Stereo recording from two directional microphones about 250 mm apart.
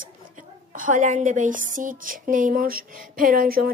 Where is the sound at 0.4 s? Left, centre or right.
Right.